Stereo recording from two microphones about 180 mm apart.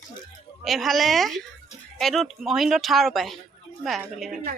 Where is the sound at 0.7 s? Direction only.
Centre (ahead or behind).